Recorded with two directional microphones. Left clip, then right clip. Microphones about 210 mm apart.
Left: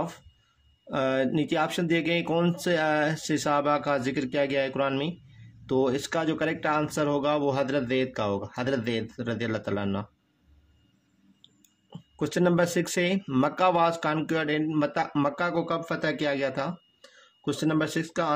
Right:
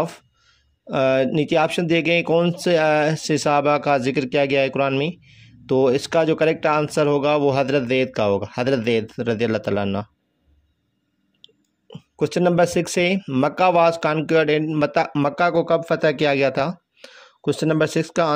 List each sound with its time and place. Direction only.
0.8 s speech: 30° right (ahead or behind)
11.4 s speech: 25° right (ahead or behind)